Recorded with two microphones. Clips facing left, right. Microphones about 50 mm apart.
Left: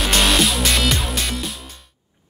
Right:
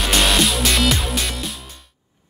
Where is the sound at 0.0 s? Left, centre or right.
Centre.